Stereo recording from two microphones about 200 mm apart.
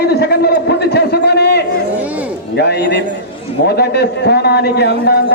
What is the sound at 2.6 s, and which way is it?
A man's voice, 60° left (ahead or behind).